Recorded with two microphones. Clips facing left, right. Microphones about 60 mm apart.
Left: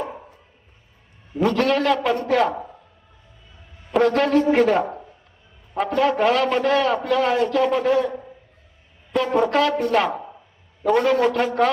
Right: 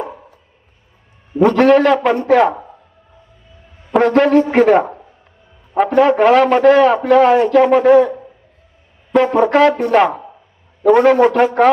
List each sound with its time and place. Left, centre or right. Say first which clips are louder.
1.4 s a man's voice: right 9 dB; right
4.0 s a man's voice: right 6 dB; right
9.1 s a man's voice: right 7 dB; right